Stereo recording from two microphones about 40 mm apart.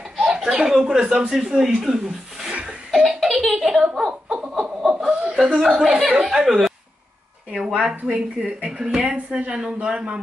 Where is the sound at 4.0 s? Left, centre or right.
Centre.